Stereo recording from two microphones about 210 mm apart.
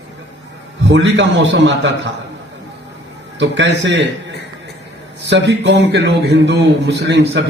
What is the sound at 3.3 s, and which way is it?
Mantra, 55° right (ahead or behind).